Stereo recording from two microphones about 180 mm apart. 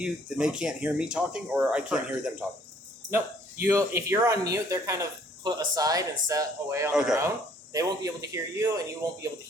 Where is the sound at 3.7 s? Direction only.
15° right (ahead or behind).